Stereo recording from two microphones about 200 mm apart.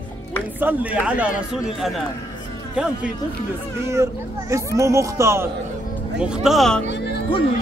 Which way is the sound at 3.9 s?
15° right (ahead or behind).